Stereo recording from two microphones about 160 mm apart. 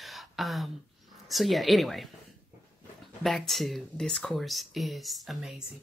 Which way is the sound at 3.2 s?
Centre (ahead or behind).